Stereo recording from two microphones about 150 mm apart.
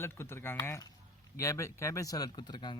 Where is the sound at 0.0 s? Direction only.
15° left (ahead or behind).